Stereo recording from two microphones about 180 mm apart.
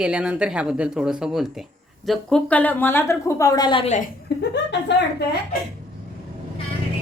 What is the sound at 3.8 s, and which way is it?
Speech, 45° left (ahead or behind).